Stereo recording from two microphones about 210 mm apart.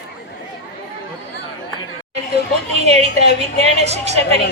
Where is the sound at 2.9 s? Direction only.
30° right (ahead or behind).